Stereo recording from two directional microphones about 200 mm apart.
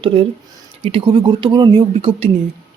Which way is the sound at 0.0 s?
25° right (ahead or behind).